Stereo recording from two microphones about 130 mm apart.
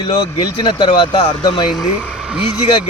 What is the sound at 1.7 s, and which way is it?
Speech, 5° right (ahead or behind).